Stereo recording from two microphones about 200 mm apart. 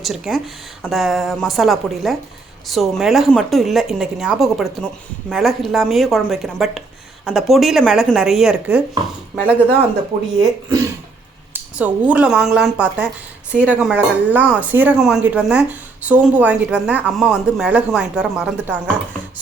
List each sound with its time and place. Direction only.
0.0 s a woman's voice: centre (ahead or behind)
10.4 s speech: 15° right (ahead or behind)
11.8 s speech: 5° right (ahead or behind)